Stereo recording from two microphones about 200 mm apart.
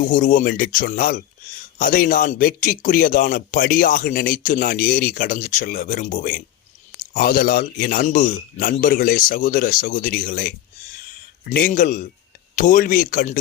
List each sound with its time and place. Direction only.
0.0 s speech: 40° left (ahead or behind)